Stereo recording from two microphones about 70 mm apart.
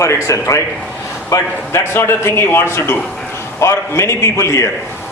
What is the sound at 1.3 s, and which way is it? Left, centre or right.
A man's voice, left.